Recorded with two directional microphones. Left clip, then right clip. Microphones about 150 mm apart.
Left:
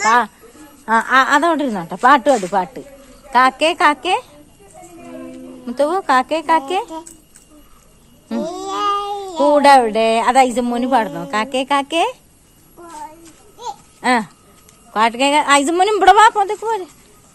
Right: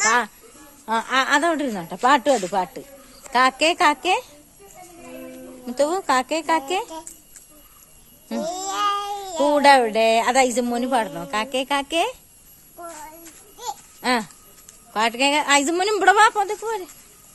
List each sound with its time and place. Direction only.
0.0 s a woman's voice: 10° right (ahead or behind)
5.6 s a woman's voice: 20° right (ahead or behind)
8.3 s a sound: 10° right (ahead or behind)
9.6 s a woman's voice: 20° right (ahead or behind)
10.9 s a woman's voice: centre (ahead or behind)
14.0 s a woman's voice: centre (ahead or behind)